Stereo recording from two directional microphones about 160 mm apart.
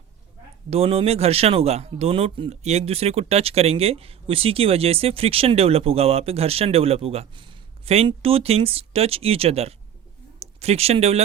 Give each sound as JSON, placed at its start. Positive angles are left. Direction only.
{"t": 0.7, "sound": "speech", "side_deg": -40}